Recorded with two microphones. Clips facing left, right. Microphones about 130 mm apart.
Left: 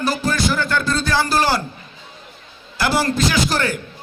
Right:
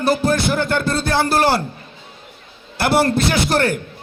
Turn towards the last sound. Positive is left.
turn(degrees=-60)  # may be behind; listen again after turning